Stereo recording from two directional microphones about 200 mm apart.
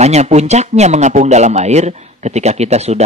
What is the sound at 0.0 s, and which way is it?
A man's voice, 35° right (ahead or behind).